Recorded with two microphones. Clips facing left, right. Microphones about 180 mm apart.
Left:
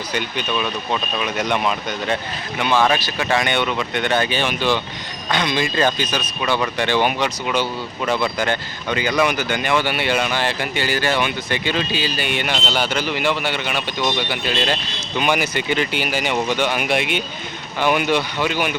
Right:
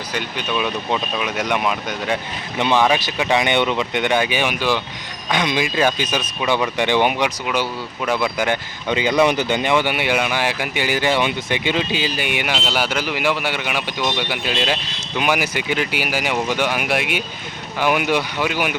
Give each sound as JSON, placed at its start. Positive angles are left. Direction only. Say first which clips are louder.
{"t": 0.1, "sound": "speech", "louder": "even", "side_deg": -5}
{"t": 2.6, "sound": "speech", "louder": "right 1 dB", "side_deg": -25}
{"t": 7.4, "sound": "speech", "louder": "left 1 dB", "side_deg": -5}